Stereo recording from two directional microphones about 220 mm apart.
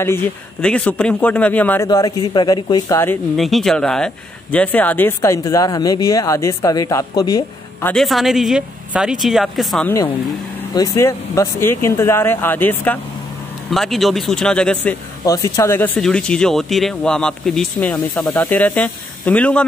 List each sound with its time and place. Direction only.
0.0 s speech: 10° left (ahead or behind)
3.3 s speech: centre (ahead or behind); by 7.9 s 15° left (ahead or behind)
7.9 s speech: centre (ahead or behind)
10.7 s speech: 15° left (ahead or behind)
15.2 s speech: 15° left (ahead or behind)